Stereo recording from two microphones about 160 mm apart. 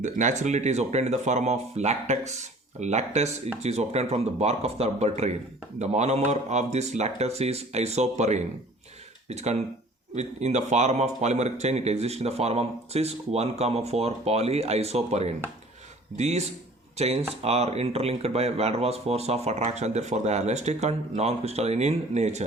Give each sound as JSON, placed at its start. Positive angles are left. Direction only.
{"t": 0.0, "sound": "speech", "side_deg": -50}